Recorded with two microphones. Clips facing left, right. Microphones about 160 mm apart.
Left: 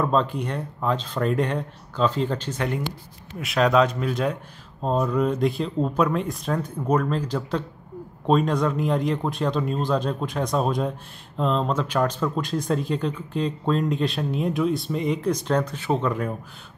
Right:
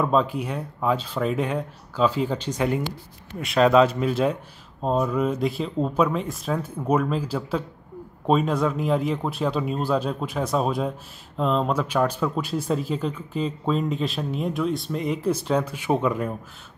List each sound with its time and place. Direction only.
0.0 s speech: 5° right (ahead or behind)